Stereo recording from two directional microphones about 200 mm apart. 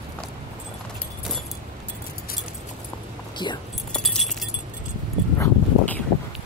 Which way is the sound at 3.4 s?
25° left (ahead or behind).